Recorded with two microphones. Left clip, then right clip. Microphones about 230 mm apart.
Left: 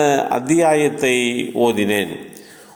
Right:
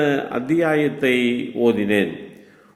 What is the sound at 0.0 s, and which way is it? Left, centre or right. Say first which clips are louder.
A man's voice: left 5 dB; centre.